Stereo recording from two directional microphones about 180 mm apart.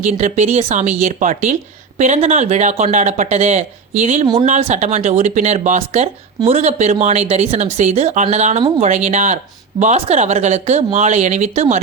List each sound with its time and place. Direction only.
0.0 s speech: 40° right (ahead or behind)